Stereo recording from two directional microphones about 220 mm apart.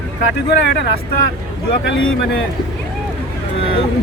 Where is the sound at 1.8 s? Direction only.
60° left (ahead or behind).